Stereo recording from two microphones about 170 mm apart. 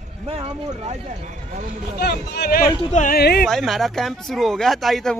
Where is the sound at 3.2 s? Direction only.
70° left (ahead or behind).